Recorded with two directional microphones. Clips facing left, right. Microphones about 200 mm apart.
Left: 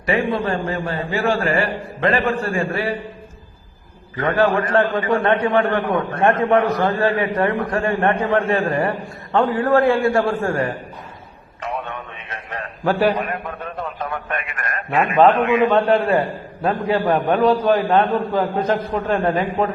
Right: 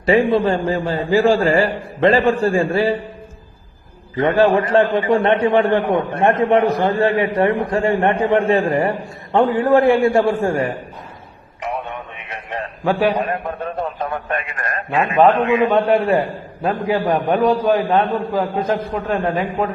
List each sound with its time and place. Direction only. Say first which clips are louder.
0.0 s a man's voice: right 6 dB; 30° right (ahead or behind)
4.5 s a man's voice: right 3 dB; 20° right (ahead or behind)
12.8 s a man's voice: even; centre (ahead or behind)
13.1 s a man's voice: right 4 dB; 30° right (ahead or behind); by 19.6 s 5° right (ahead or behind)